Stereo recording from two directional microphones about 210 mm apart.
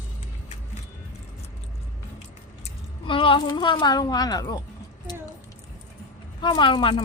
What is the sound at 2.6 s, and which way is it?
Speech, 25° left (ahead or behind).